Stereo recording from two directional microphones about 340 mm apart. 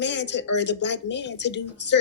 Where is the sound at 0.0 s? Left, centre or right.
Left.